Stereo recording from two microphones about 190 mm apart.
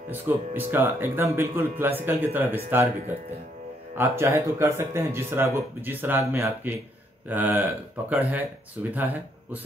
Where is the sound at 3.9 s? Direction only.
15° right (ahead or behind).